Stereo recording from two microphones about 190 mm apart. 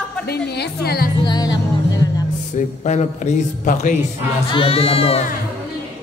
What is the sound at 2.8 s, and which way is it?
A man's voice, 35° left (ahead or behind).